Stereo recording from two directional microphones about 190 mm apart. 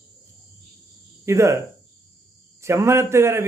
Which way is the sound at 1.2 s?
15° right (ahead or behind).